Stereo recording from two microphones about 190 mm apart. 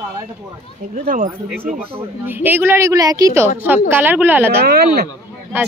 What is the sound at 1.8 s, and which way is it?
Speech, 30° right (ahead or behind).